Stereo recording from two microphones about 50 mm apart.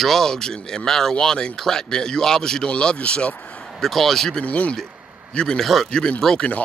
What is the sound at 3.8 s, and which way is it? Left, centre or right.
Speech, centre.